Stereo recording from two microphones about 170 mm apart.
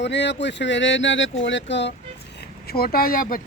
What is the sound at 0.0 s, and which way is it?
Speech, 90° left.